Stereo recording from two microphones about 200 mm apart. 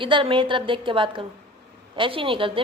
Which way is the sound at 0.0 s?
25° right (ahead or behind).